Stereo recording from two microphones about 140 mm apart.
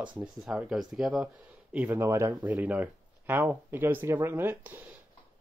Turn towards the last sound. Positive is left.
turn(degrees=-15)  # may be behind; listen again after turning